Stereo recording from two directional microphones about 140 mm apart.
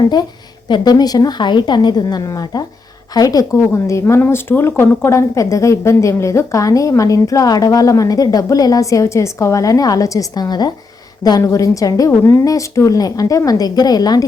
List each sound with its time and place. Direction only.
0.7 s speech: 30° left (ahead or behind)